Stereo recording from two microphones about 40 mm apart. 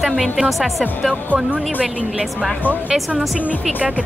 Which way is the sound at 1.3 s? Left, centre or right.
Right.